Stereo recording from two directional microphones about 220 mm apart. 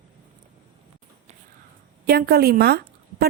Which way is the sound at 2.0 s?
45° right (ahead or behind).